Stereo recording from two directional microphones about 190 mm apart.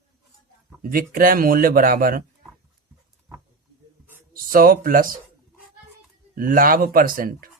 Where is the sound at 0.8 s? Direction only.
45° right (ahead or behind).